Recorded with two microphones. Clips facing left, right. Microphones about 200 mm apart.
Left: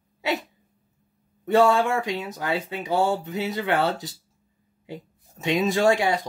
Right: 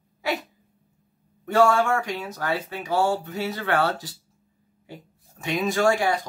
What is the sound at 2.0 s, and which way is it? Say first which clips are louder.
Speech: left 2 dB; 20° left (ahead or behind).